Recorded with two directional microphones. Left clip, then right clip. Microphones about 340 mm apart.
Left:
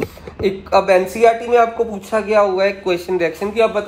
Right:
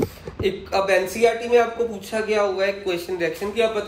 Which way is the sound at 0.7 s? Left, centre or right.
Centre.